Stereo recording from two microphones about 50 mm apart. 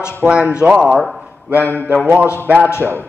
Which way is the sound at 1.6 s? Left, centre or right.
Left.